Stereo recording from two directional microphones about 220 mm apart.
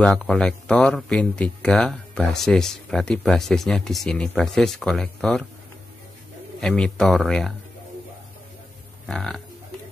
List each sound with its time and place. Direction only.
0.0 s speech: 5° left (ahead or behind)
6.6 s speech: 5° left (ahead or behind)
9.0 s a sound: 5° left (ahead or behind)